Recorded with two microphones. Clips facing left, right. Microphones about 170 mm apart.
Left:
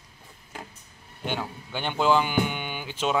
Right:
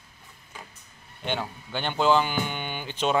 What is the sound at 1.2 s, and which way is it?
Speech, 10° left (ahead or behind).